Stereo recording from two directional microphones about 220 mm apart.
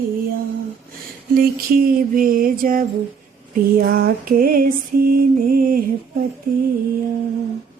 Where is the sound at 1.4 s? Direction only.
40° right (ahead or behind).